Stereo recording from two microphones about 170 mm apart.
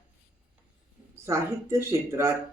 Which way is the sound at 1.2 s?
15° right (ahead or behind).